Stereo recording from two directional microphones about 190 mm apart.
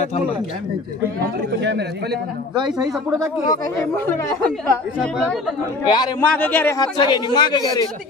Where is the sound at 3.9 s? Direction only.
10° left (ahead or behind).